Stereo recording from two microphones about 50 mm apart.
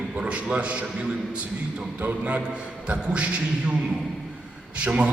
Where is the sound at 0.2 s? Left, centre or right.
Right.